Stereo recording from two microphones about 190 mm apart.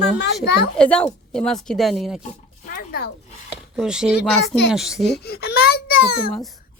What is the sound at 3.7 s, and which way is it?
Speech, 5° right (ahead or behind).